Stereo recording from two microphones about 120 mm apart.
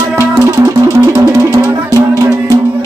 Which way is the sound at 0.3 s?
25° right (ahead or behind).